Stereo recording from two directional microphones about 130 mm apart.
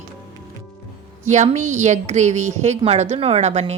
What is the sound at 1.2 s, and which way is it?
A woman's voice, 65° right (ahead or behind).